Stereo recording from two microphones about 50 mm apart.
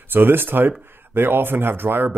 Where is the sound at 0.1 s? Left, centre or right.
Right.